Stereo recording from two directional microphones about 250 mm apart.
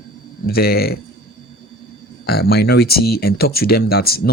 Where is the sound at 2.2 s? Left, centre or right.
Left.